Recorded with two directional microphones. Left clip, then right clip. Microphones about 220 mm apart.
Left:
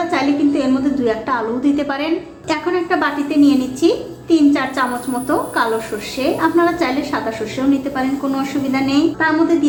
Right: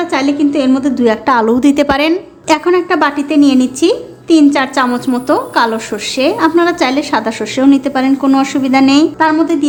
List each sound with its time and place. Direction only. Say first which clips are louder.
0.1 s a woman's voice: right 3 dB; 45° right (ahead or behind)